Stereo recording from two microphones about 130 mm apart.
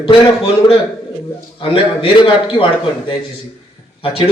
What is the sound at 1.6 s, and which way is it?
A man's voice, 40° left (ahead or behind).